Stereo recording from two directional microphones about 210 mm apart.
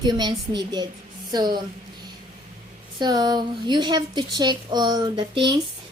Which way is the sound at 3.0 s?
20° right (ahead or behind).